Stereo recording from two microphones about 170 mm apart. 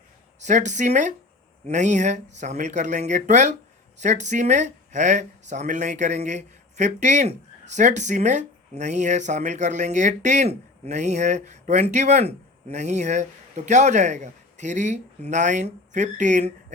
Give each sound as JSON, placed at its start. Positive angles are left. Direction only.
{"t": 0.3, "sound": "speech", "side_deg": -45}